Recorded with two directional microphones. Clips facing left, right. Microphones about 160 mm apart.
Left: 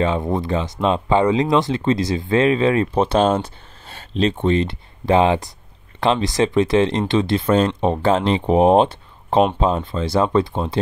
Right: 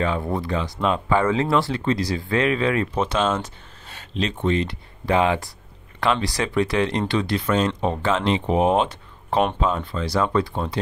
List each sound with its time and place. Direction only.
0.0 s speech: 20° left (ahead or behind)